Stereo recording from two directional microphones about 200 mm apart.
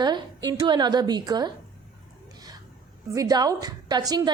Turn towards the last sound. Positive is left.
turn(degrees=-20)  # may be behind; listen again after turning